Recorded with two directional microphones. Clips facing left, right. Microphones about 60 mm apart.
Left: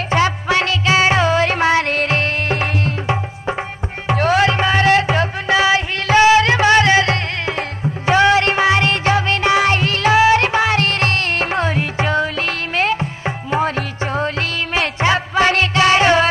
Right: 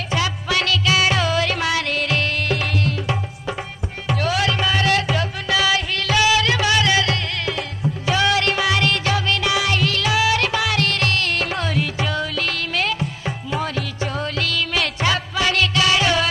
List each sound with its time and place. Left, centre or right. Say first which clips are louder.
0.1 s music: left 6 dB; left